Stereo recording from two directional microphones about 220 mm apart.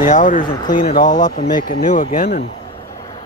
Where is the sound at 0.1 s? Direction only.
35° left (ahead or behind).